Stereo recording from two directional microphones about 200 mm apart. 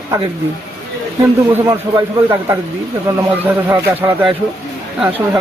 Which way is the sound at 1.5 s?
15° right (ahead or behind).